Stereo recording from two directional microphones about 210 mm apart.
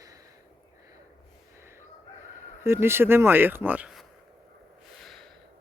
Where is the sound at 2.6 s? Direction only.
10° right (ahead or behind).